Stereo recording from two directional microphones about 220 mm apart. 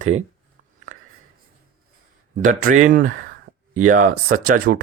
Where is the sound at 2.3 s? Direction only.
35° right (ahead or behind).